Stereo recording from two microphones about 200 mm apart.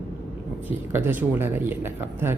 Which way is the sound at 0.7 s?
10° right (ahead or behind).